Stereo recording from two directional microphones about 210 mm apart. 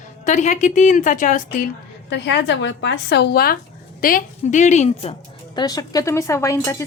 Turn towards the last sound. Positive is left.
turn(degrees=15)  # may be behind; listen again after turning